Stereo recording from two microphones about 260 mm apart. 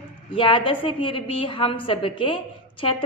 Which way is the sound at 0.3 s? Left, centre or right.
Centre.